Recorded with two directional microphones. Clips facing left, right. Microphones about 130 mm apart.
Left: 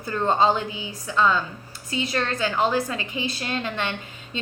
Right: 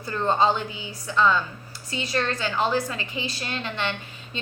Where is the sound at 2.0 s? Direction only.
20° left (ahead or behind).